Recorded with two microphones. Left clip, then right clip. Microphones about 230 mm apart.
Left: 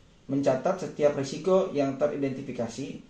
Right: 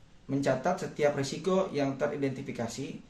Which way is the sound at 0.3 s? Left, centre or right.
Right.